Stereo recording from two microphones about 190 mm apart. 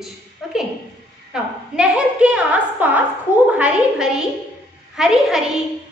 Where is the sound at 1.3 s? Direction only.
5° right (ahead or behind).